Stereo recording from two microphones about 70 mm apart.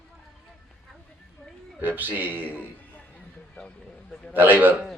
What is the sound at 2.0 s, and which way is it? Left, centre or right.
Speech, right.